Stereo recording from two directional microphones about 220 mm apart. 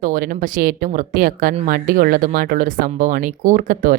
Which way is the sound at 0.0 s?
40° right (ahead or behind).